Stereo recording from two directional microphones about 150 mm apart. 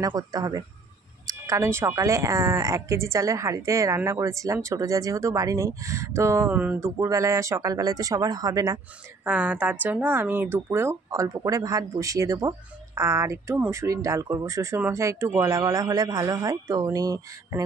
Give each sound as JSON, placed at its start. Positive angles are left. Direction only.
{"t": 0.0, "sound": "speech", "side_deg": -25}
{"t": 7.0, "sound": "speech", "side_deg": -20}
{"t": 9.2, "sound": "speech", "side_deg": -10}